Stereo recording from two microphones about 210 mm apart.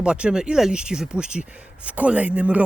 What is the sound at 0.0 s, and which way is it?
Speech, 5° right (ahead or behind).